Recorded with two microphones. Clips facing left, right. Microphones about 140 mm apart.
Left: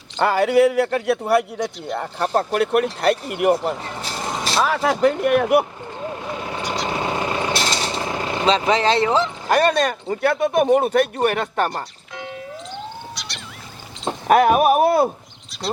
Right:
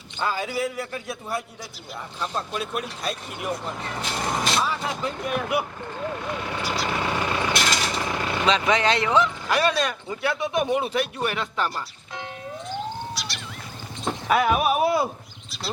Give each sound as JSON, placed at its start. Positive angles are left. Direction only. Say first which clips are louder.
{"t": 0.2, "sound": "a man's voice", "louder": "left 11 dB", "side_deg": 70}
{"t": 4.1, "sound": "vehicle", "louder": "even", "side_deg": 0}
{"t": 4.6, "sound": "a man's voice", "louder": "left 10 dB", "side_deg": 75}
{"t": 6.0, "sound": "vehicle", "louder": "left 1 dB", "side_deg": 25}
{"t": 9.5, "sound": "speech", "louder": "left 5 dB", "side_deg": 45}
{"t": 13.1, "sound": "wild animals", "louder": "right 1 dB", "side_deg": 0}
{"t": 14.3, "sound": "speech", "louder": "left 7 dB", "side_deg": 50}
{"t": 15.5, "sound": "a sound", "louder": "left 6 dB", "side_deg": 0}